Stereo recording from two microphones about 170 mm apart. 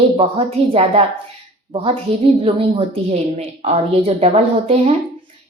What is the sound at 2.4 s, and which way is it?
Speech, 35° right (ahead or behind).